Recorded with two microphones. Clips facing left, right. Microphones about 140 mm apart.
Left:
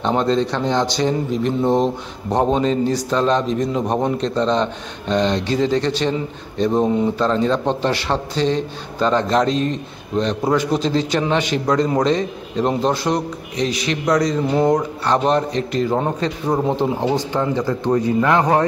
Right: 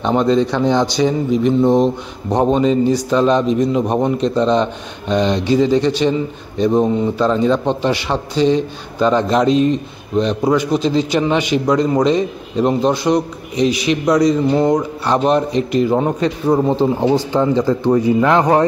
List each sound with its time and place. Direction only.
0.0 s a man's voice: 5° right (ahead or behind)
15.0 s a man's voice: 10° right (ahead or behind)
17.3 s a man's voice: 15° right (ahead or behind)
18.2 s speech: 20° right (ahead or behind)